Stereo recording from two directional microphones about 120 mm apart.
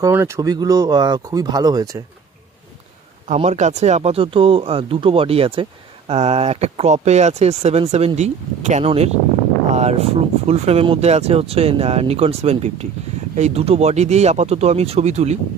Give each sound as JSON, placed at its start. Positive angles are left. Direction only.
{"t": 0.0, "sound": "speech", "side_deg": -20}
{"t": 3.3, "sound": "speech", "side_deg": -70}